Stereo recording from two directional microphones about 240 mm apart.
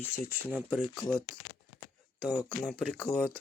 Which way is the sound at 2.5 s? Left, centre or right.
Centre.